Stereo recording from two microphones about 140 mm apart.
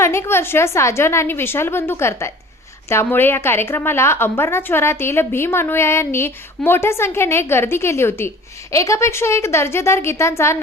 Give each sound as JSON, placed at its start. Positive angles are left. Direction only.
{"t": 0.0, "sound": "a woman's voice", "side_deg": 20}